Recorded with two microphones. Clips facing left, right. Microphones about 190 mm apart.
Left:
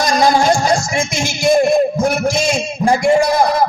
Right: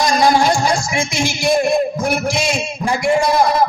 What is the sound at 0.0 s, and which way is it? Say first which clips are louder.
A man's voice: left 1 dB; 45° left (ahead or behind).